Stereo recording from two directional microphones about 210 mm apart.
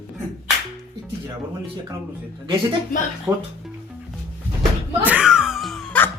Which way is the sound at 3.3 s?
15° right (ahead or behind).